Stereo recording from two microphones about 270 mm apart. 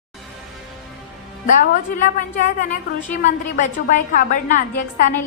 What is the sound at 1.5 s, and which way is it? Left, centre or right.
A woman's voice, left.